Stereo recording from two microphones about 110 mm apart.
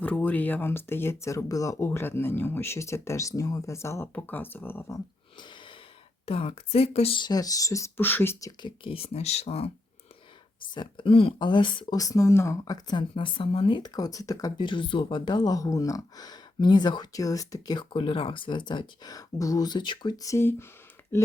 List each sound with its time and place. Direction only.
0.0 s speech: 15° left (ahead or behind)
5.4 s a sound: 45° left (ahead or behind)
6.2 s speech: 65° left (ahead or behind)
7.2 s speech: 35° left (ahead or behind); by 8.4 s 20° left (ahead or behind)
8.4 s speech: 45° left (ahead or behind); by 9.7 s 70° left (ahead or behind)
10.8 s speech: 50° left (ahead or behind)
11.9 s speech: 30° left (ahead or behind); by 13.7 s 60° left (ahead or behind)
13.7 s speech: 40° left (ahead or behind)
14.6 s speech: 50° left (ahead or behind)
17.9 s speech: 55° left (ahead or behind)
20.2 s speech: 25° left (ahead or behind)